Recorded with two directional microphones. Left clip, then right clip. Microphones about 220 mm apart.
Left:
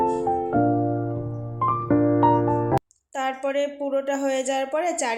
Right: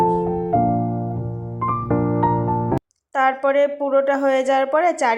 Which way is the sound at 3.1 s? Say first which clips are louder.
Right 8 dB; 15° right (ahead or behind).